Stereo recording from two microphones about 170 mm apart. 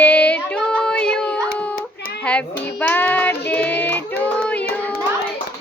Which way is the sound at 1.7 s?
55° left (ahead or behind).